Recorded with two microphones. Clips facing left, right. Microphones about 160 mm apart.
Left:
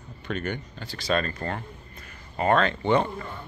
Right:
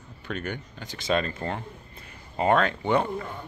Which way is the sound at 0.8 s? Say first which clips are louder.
Even; 20° right (ahead or behind).